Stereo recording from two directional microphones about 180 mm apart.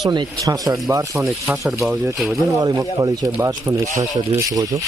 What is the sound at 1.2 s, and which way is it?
Speech, 5° right (ahead or behind).